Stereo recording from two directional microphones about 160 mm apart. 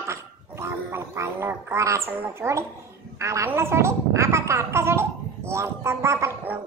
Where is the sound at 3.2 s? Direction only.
20° right (ahead or behind).